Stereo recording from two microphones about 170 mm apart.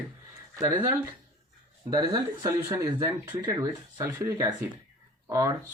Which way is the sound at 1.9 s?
20° right (ahead or behind).